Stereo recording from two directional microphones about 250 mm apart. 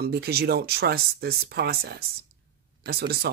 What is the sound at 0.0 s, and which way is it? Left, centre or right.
Speech, right.